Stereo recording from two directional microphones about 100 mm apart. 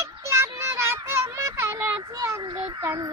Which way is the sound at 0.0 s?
25° right (ahead or behind).